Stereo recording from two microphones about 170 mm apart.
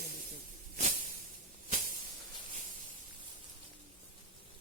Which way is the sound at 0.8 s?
50° right (ahead or behind).